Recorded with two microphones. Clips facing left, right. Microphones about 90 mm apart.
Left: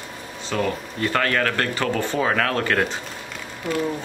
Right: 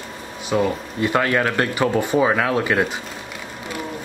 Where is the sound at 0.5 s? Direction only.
15° right (ahead or behind).